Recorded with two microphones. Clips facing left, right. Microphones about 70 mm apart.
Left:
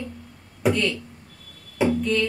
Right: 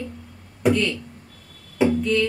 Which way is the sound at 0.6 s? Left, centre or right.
Centre.